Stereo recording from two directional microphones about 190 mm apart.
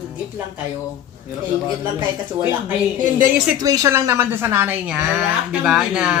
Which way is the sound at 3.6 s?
20° right (ahead or behind).